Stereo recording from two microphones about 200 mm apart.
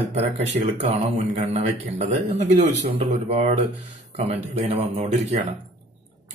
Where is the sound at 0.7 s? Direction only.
30° right (ahead or behind).